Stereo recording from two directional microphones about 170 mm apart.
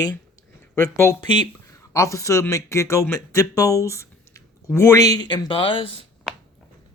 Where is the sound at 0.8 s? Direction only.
15° left (ahead or behind); by 6.0 s 30° left (ahead or behind).